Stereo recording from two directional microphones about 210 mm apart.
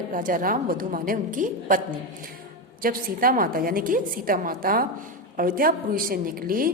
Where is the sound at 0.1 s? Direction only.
40° right (ahead or behind).